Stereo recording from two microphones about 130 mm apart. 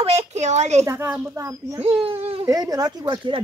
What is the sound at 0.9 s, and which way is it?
Speech, 20° right (ahead or behind).